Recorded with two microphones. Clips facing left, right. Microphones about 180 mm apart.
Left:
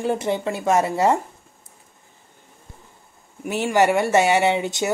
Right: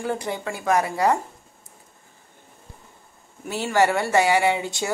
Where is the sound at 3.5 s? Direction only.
20° left (ahead or behind).